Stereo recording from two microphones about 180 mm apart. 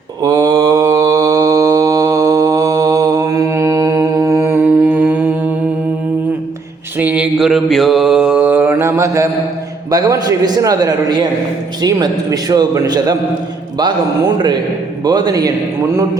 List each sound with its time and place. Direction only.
0.2 s mantra: 20° right (ahead or behind)
7.0 s mantra: 5° right (ahead or behind)
9.9 s a man's voice: 20° right (ahead or behind)